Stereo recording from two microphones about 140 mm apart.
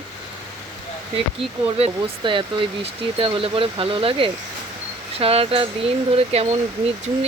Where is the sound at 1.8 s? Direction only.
40° right (ahead or behind).